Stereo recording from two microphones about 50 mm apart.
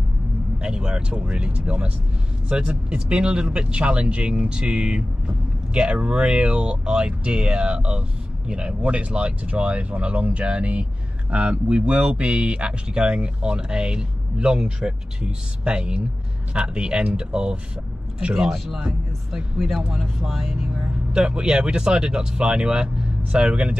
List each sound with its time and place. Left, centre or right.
0.6 s speech: centre
18.3 s speech: centre
19.9 s speech: centre
21.1 s speech: centre